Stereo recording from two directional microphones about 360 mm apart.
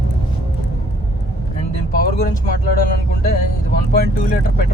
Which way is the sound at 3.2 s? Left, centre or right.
Left.